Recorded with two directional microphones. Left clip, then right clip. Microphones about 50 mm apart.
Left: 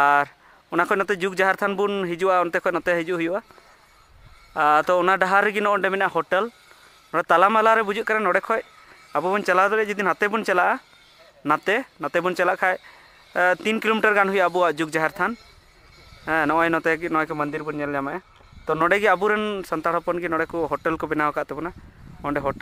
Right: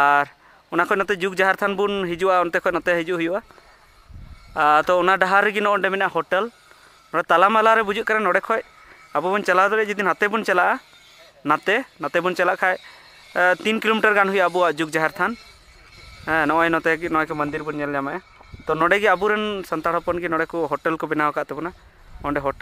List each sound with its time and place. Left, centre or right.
0.0 s speech: centre
4.6 s speech: centre
7.1 s speech: centre
12.7 s a sound: right
13.4 s speech: centre